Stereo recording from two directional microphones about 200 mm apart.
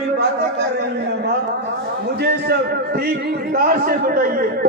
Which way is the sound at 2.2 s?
50° right (ahead or behind).